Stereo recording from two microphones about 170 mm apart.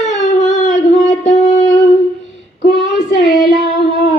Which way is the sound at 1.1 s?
45° left (ahead or behind).